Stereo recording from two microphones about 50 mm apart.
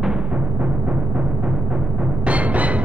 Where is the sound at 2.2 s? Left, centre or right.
Right.